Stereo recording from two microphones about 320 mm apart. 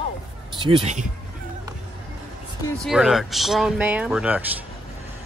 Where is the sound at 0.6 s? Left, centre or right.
Right.